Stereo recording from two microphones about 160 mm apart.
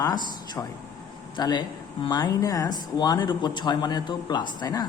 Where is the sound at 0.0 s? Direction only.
25° left (ahead or behind).